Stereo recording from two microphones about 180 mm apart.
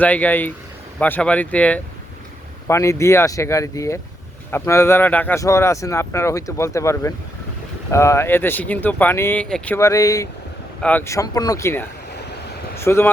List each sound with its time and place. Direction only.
0.0 s speech: 10° left (ahead or behind)